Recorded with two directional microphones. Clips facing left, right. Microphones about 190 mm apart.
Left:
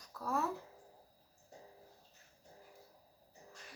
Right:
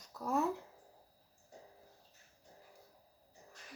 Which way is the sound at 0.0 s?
20° right (ahead or behind).